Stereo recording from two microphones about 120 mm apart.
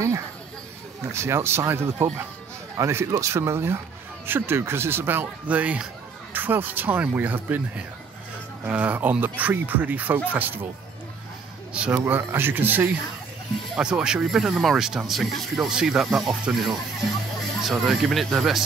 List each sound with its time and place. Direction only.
1.1 s speech: 20° right (ahead or behind)
11.7 s speech: 15° right (ahead or behind)